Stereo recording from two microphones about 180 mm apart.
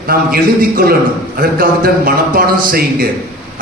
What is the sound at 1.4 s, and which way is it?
A man's voice, 55° right (ahead or behind).